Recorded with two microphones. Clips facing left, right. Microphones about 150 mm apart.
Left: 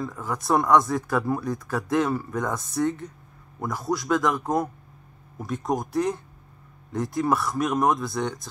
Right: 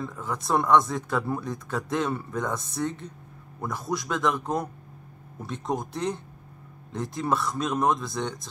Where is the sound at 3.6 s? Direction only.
15° left (ahead or behind).